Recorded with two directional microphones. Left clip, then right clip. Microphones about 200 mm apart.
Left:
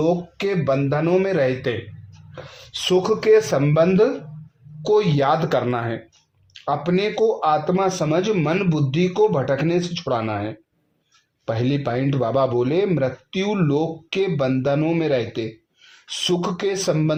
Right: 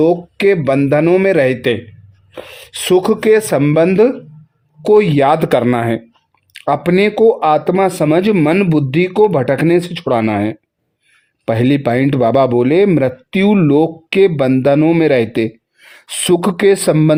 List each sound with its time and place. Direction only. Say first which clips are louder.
0.0 s speech: right 9 dB; 50° right (ahead or behind)